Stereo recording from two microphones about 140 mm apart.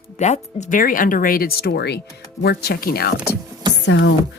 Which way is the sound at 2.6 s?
90° left.